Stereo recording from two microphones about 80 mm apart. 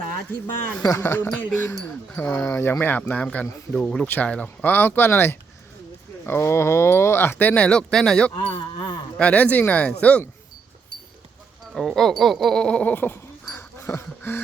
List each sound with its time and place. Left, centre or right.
0.8 s speech: left
3.7 s speech: centre
8.4 s speech: left
9.1 s speech: centre
11.7 s speech: centre; by 14.4 s left